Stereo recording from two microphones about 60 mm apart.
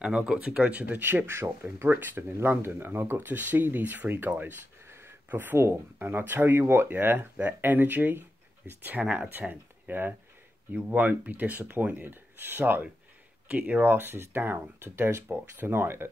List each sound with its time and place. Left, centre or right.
0.0 s speech: centre
0.8 s speech: right
4.8 s a sound: right
5.9 s speech: right
9.0 s speech: centre
9.4 s speech: right